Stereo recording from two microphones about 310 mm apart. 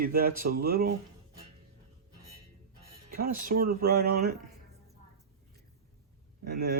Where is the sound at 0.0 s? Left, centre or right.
Right.